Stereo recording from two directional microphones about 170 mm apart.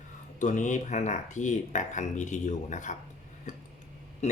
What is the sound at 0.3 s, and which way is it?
Speech, 45° left (ahead or behind).